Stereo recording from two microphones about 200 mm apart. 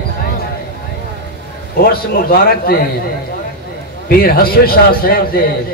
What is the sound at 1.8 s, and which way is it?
A man's voice, 45° left (ahead or behind).